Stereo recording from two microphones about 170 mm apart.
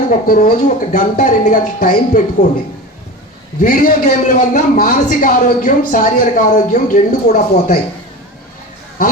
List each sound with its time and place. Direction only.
0.1 s a man's voice: 55° left (ahead or behind)
3.6 s a man's voice: 55° left (ahead or behind)